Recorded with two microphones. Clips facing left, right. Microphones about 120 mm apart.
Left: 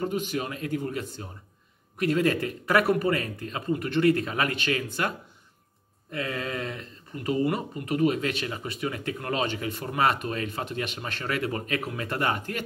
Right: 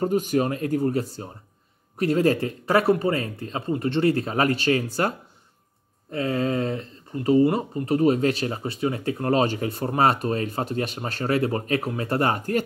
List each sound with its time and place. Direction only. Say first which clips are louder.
0.0 s speech: right 7 dB; 40° right (ahead or behind)
6.1 s speech: right 7 dB; 30° right (ahead or behind)